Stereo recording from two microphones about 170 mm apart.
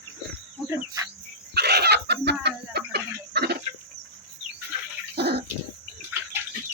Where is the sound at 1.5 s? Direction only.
70° right (ahead or behind).